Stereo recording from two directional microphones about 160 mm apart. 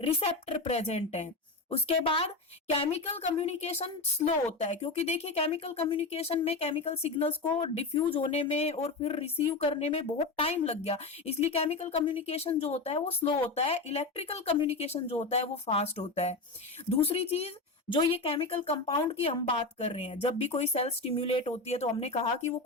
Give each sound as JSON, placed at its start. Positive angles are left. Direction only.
{"t": 0.0, "sound": "a woman's voice", "side_deg": 40}